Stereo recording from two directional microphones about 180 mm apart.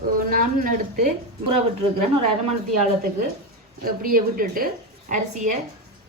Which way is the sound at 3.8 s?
55° right (ahead or behind).